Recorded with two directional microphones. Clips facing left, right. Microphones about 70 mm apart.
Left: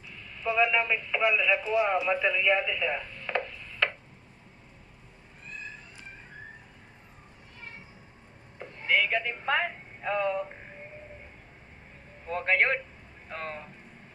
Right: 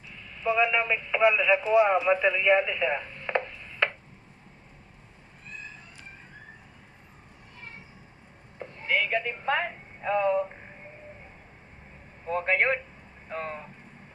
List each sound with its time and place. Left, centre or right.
0.1 s speech: centre
8.5 s a sound: centre
12.3 s speech: centre